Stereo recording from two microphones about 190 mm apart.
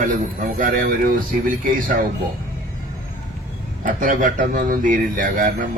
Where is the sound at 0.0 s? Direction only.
45° right (ahead or behind).